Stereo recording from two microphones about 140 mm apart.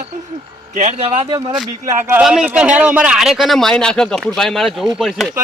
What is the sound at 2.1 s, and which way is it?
A man's voice, 5° right (ahead or behind).